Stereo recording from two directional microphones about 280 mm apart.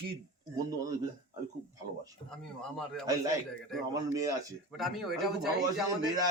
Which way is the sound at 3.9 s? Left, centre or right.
Centre.